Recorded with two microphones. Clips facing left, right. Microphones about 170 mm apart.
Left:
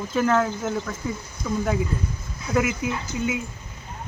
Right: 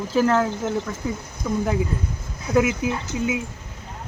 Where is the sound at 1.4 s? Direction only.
5° right (ahead or behind).